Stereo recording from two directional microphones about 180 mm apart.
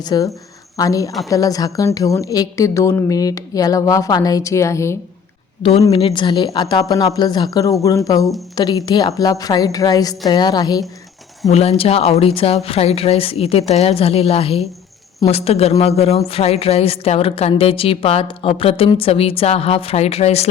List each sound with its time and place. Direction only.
0.0 s a woman's voice: 20° left (ahead or behind)
5.9 s a woman's voice: 30° left (ahead or behind)
11.5 s speech: 35° left (ahead or behind)